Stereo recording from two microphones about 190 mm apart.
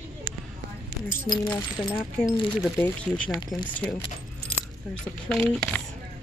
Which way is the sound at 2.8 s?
5° left (ahead or behind).